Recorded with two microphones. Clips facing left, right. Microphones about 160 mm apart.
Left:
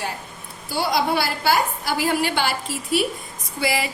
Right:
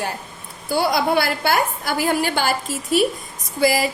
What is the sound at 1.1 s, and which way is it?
A woman's voice, 55° right (ahead or behind).